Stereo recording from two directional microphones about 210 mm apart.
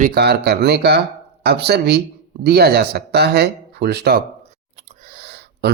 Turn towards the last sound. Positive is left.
turn(degrees=-50)  # may be behind; listen again after turning